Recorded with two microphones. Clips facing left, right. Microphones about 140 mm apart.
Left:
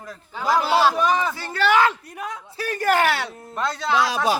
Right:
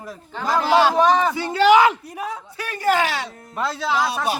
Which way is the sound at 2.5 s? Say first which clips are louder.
Even; 45° left (ahead or behind).